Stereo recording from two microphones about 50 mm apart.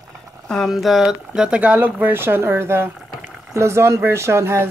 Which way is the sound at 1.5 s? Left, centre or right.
Right.